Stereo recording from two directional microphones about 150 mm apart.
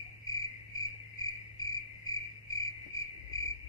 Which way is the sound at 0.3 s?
25° left (ahead or behind).